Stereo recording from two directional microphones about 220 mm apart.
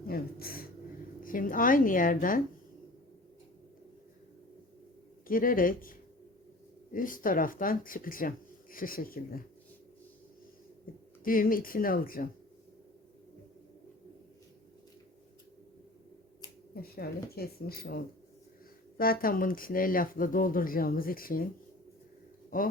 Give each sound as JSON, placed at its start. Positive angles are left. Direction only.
{"t": 0.1, "sound": "speech", "side_deg": 45}
{"t": 5.3, "sound": "speech", "side_deg": 40}
{"t": 11.2, "sound": "speech", "side_deg": 40}
{"t": 16.8, "sound": "speech", "side_deg": 45}
{"t": 22.5, "sound": "speech", "side_deg": 40}